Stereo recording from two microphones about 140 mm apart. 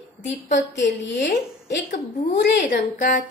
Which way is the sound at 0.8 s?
65° left (ahead or behind).